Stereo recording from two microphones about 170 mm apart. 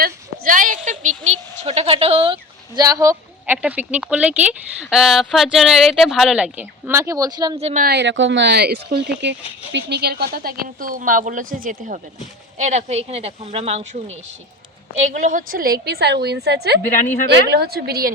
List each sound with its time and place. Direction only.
0.0 s a woman's voice: 55° right (ahead or behind); by 7.6 s 25° right (ahead or behind)
7.6 s a woman's voice: 45° right (ahead or behind)
7.9 s a woman's voice: 85° right; by 14.0 s 40° right (ahead or behind)
15.0 s a woman's voice: 45° right (ahead or behind); by 18.1 s 65° right (ahead or behind)